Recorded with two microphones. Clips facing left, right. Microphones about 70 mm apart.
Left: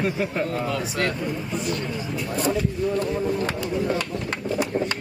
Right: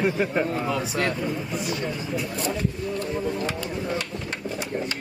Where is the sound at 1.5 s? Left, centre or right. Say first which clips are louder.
Left 1 dB; centre.